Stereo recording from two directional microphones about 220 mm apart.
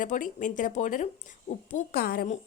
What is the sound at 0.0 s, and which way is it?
A woman's voice, 35° left (ahead or behind).